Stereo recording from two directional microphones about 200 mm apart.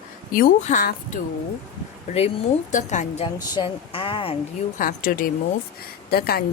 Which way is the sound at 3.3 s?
25° left (ahead or behind).